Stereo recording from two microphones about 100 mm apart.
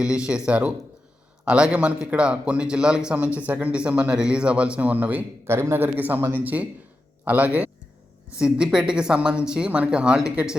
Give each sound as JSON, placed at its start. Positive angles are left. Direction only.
{"t": 0.0, "sound": "a man's voice", "side_deg": -10}